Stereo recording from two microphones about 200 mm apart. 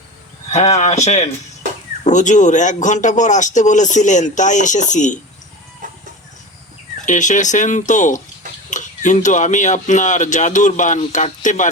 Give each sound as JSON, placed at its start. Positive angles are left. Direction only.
{"t": 0.5, "sound": "speech", "side_deg": 35}
{"t": 7.0, "sound": "speech", "side_deg": 40}